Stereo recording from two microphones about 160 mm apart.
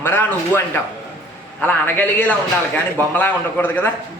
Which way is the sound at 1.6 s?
10° left (ahead or behind).